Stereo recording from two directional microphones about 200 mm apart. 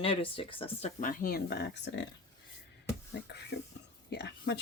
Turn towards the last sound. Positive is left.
turn(degrees=60)  # may be behind; listen again after turning